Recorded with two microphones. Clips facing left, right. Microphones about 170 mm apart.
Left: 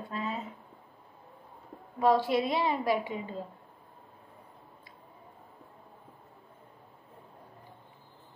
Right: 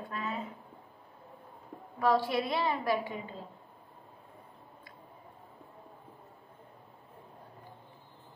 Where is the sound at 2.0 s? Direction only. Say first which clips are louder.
Left 3 dB; 20° left (ahead or behind).